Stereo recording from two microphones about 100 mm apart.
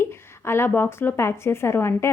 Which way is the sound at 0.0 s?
25° left (ahead or behind).